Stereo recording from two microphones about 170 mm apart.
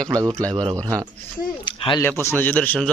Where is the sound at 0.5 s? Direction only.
30° right (ahead or behind).